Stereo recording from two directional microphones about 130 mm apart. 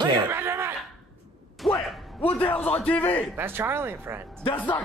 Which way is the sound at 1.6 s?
10° left (ahead or behind).